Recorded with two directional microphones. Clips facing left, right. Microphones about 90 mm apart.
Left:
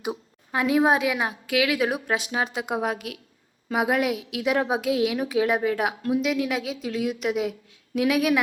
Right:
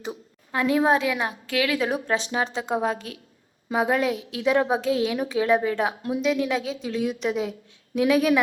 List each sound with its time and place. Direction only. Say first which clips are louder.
0.0 s a woman's voice: left 3 dB; 15° left (ahead or behind)